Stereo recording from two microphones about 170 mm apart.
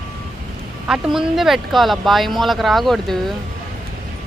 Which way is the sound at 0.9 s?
5° right (ahead or behind).